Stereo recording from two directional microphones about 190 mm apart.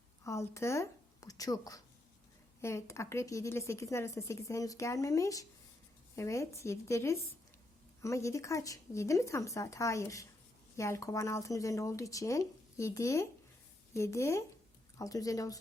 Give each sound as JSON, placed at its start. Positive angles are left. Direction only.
{"t": 0.3, "sound": "a woman's voice", "side_deg": 15}